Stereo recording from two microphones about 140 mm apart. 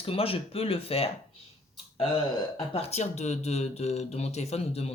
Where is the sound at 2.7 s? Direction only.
50° left (ahead or behind).